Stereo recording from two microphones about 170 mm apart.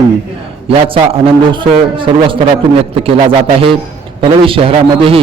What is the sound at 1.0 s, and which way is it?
A man's voice, 30° right (ahead or behind).